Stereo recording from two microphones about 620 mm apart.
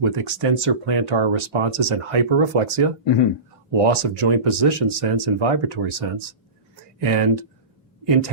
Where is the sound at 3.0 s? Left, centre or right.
Left.